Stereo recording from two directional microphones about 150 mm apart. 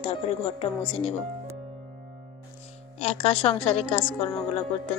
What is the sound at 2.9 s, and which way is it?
A woman's voice, 40° left (ahead or behind).